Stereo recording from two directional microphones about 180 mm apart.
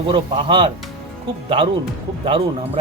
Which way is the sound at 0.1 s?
30° right (ahead or behind).